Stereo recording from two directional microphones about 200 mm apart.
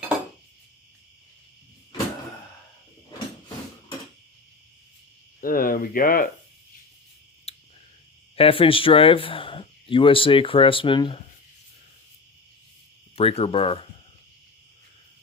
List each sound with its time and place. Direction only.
5.4 s speech: 45° left (ahead or behind)
7.5 s a sound: 30° left (ahead or behind)
8.4 s speech: 25° left (ahead or behind)
13.1 s speech: 30° left (ahead or behind)